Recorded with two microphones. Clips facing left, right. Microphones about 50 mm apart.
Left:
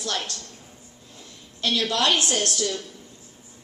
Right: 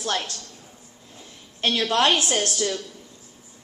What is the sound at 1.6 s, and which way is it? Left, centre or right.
Speech, right.